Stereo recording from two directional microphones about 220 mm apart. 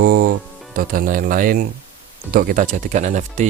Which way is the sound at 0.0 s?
40° right (ahead or behind).